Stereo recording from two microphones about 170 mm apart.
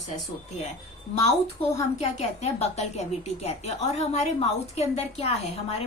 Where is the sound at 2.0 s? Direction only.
35° left (ahead or behind).